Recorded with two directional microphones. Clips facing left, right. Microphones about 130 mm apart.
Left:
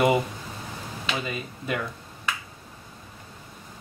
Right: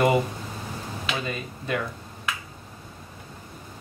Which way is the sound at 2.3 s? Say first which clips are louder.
Even; centre (ahead or behind).